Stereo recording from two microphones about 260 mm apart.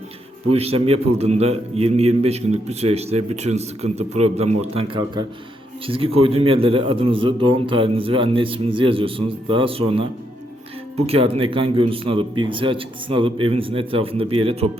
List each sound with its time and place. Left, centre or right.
0.5 s a man's voice: right